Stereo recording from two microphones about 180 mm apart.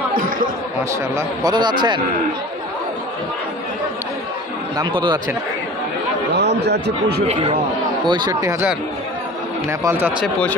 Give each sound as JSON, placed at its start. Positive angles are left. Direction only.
{"t": 0.1, "sound": "speech", "side_deg": -50}
{"t": 1.1, "sound": "speech", "side_deg": -25}
{"t": 4.7, "sound": "speech", "side_deg": -25}
{"t": 6.3, "sound": "speech", "side_deg": -70}
{"t": 8.1, "sound": "speech", "side_deg": -20}
{"t": 9.7, "sound": "speech", "side_deg": -15}